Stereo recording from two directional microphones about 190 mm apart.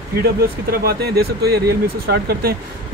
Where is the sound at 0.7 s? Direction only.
55° right (ahead or behind).